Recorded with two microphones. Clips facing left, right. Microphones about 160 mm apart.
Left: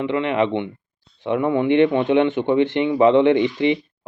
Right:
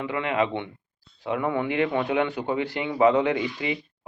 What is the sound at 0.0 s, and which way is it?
A man's voice, 25° left (ahead or behind).